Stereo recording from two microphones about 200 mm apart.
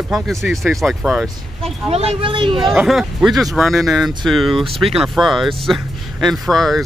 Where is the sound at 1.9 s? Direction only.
30° right (ahead or behind).